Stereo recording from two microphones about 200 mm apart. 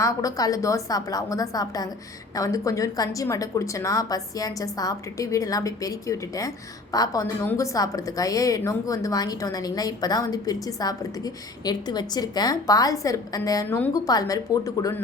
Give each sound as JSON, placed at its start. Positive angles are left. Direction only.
{"t": 0.0, "sound": "a woman's voice", "side_deg": 15}